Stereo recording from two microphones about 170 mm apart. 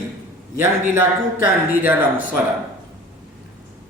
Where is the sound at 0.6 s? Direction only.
15° right (ahead or behind).